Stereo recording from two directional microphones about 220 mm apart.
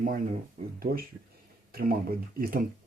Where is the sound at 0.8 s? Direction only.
40° right (ahead or behind).